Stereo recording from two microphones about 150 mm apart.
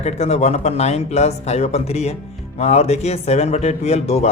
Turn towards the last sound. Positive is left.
turn(degrees=45)  # may be behind; listen again after turning